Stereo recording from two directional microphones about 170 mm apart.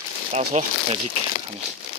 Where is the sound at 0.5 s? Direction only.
40° right (ahead or behind).